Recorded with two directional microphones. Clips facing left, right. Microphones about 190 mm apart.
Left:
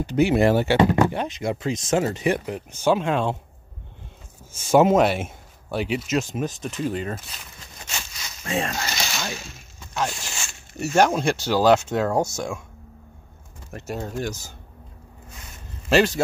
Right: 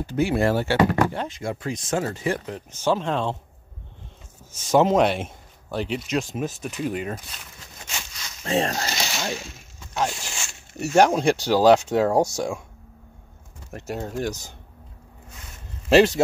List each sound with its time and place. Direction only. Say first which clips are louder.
0.1 s speech: left 3 dB; 20° left (ahead or behind)
4.6 s speech: left 2 dB; 10° left (ahead or behind); by 7.2 s 10° right (ahead or behind)
8.5 s speech: right 3 dB; 35° right (ahead or behind)
9.0 s a sound: right 2 dB; 20° right (ahead or behind)
9.9 s speech: right 1 dB; 15° right (ahead or behind)
13.7 s speech: even; 15° right (ahead or behind)